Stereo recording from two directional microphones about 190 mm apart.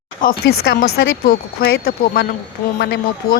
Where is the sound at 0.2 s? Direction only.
45° left (ahead or behind).